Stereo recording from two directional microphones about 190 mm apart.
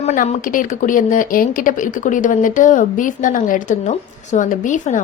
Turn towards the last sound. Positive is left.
turn(degrees=40)  # may be behind; listen again after turning